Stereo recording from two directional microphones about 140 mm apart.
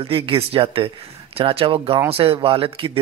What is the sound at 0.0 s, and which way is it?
Speech, 40° right (ahead or behind).